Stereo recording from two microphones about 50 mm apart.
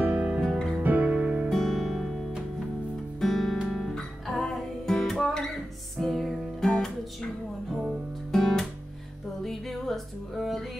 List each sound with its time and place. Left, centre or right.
0.0 s music: right
1.5 s music: centre
3.2 s music: centre
7.7 s music: centre
8.3 s music: centre